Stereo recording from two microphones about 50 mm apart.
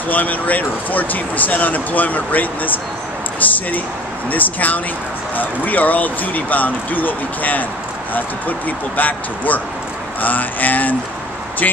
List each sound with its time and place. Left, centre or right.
0.1 s speech: left